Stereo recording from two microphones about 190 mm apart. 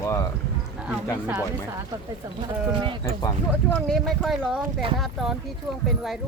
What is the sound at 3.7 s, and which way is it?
Speech, centre (ahead or behind).